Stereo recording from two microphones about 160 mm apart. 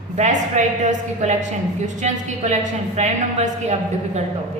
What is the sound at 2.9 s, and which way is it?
Speech, 45° right (ahead or behind).